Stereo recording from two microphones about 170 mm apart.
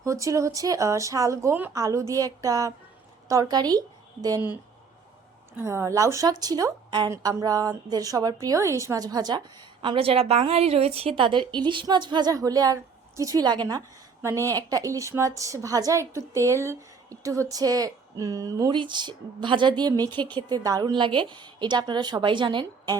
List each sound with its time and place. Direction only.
0.0 s a woman's voice: 20° right (ahead or behind)
5.5 s a woman's voice: 15° right (ahead or behind)